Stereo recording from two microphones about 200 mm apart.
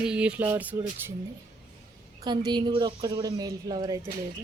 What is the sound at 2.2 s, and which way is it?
A woman's voice, 20° right (ahead or behind).